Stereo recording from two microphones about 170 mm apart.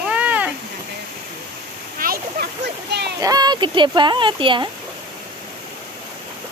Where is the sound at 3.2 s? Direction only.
25° right (ahead or behind).